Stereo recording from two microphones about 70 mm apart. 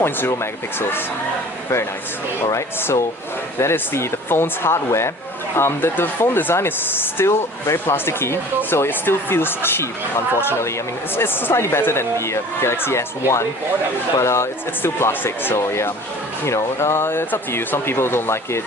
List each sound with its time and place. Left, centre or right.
0.0 s speech: left
3.6 s speech: left
14.8 s speech: left